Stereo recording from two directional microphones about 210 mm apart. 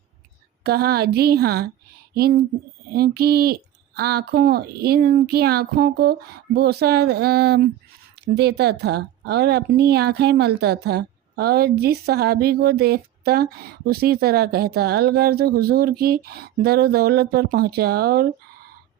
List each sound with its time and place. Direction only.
0.6 s a woman's voice: 50° right (ahead or behind)